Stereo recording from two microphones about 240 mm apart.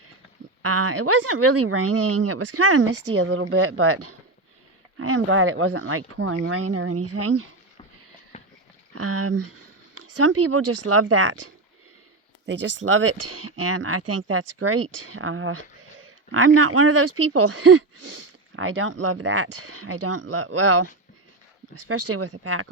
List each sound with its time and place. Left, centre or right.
1.0 s speech: right
2.7 s speech: right
8.3 s pig: left
9.0 s speech: right
12.5 s speech: right
13.1 s speech: right
13.7 s speech: right
17.3 s speech: right
18.5 s speech: right
19.5 s speech: right
21.8 s speech: right